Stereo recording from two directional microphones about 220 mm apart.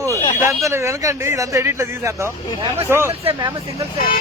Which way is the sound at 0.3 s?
10° right (ahead or behind).